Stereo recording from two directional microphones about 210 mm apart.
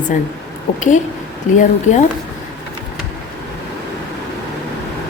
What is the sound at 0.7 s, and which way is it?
A woman's voice, 35° left (ahead or behind).